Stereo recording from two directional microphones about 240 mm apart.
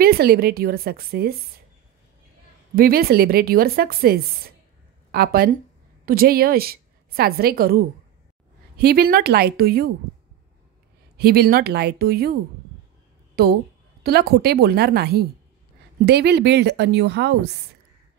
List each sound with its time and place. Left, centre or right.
0.0 s a woman's voice: right
2.7 s a woman's voice: right
11.1 s a woman's voice: right
13.4 s a woman's voice: right